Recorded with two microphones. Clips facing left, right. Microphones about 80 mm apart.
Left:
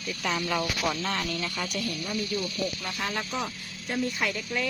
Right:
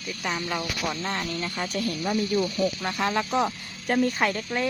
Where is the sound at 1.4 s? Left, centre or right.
Right.